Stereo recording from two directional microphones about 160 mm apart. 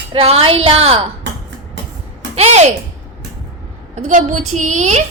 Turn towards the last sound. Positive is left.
turn(degrees=-45)  # may be behind; listen again after turning